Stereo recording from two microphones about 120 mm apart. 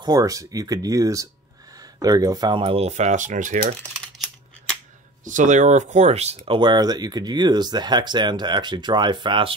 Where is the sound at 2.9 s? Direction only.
80° right.